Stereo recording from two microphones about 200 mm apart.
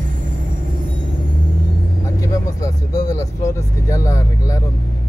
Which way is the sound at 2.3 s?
15° left (ahead or behind).